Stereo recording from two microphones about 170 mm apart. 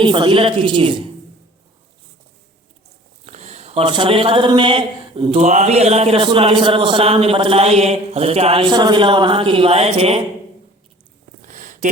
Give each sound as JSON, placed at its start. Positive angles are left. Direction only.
{"t": 0.0, "sound": "a woman's voice", "side_deg": -30}
{"t": 3.2, "sound": "speech", "side_deg": -40}
{"t": 11.4, "sound": "a sound", "side_deg": -50}